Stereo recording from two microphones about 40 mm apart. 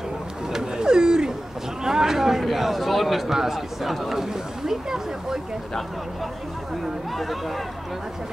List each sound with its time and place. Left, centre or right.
0.5 s speech: centre
6.8 s speech: centre